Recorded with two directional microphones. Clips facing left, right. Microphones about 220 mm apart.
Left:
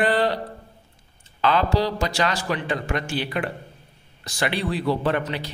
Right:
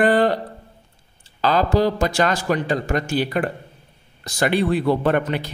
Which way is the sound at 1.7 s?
50° right (ahead or behind).